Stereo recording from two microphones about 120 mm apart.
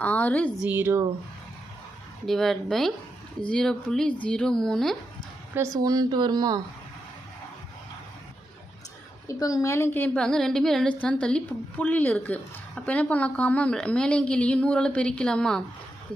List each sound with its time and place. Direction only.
0.0 s a woman's voice: 15° left (ahead or behind)
0.6 s speech: 15° right (ahead or behind)
2.2 s a woman's voice: centre (ahead or behind)
5.5 s speech: 30° right (ahead or behind)
9.2 s a woman's voice: 30° left (ahead or behind)
10.2 s a woman's voice: 5° left (ahead or behind)